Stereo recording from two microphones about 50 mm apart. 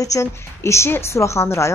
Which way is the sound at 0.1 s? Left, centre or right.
Left.